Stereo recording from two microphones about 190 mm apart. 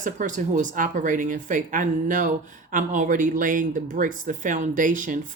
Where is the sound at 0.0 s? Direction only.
40° right (ahead or behind).